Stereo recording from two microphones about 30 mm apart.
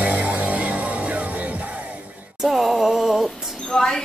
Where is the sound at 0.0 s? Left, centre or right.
Right.